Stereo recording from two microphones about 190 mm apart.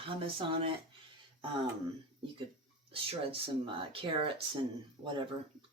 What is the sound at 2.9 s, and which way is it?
Speech, 30° right (ahead or behind).